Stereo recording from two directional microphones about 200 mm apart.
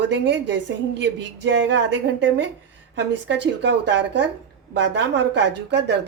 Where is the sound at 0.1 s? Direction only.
65° right (ahead or behind).